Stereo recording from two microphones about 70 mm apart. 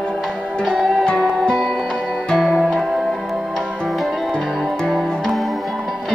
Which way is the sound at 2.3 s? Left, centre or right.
Centre.